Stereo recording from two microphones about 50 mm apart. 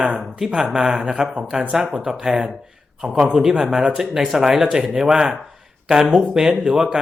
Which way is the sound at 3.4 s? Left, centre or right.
Centre.